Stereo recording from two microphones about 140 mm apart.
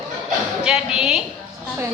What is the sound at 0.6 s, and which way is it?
Speech, 5° right (ahead or behind).